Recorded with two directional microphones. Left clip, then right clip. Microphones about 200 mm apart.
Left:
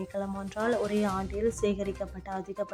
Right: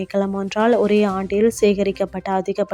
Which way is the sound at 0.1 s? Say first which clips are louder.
Right 13 dB; 35° right (ahead or behind).